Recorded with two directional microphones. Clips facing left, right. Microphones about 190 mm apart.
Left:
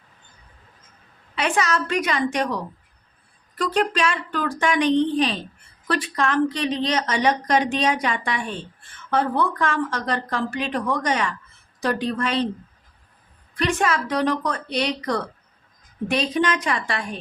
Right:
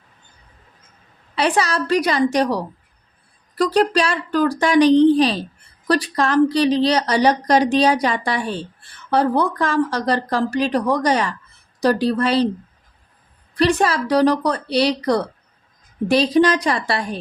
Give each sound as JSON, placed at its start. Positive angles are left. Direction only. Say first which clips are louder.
{"t": 1.4, "sound": "a woman's voice", "louder": "right 3 dB", "side_deg": -35}
{"t": 13.6, "sound": "a woman's voice", "louder": "right 5 dB", "side_deg": -35}